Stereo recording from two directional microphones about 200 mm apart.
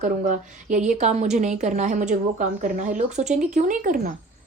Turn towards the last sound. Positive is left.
turn(degrees=-40)  # may be behind; listen again after turning